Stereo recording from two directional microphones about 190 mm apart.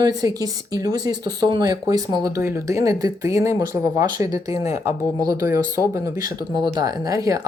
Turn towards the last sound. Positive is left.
turn(degrees=-15)  # may be behind; listen again after turning